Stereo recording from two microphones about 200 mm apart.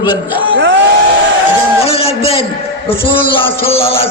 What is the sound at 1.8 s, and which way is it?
A man's voice, 30° left (ahead or behind).